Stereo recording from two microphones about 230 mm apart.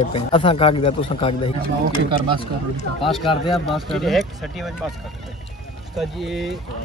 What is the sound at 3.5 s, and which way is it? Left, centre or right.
Speech, centre.